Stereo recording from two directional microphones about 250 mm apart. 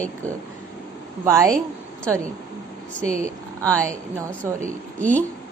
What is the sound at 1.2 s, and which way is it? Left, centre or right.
Speech, centre.